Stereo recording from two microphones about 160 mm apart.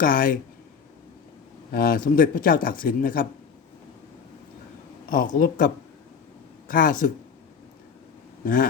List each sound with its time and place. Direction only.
0.0 s speech: 60° left (ahead or behind)
1.7 s speech: 65° left (ahead or behind)
5.1 s speech: 55° left (ahead or behind)